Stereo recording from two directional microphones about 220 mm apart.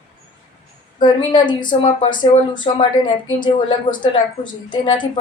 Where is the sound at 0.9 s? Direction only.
20° left (ahead or behind).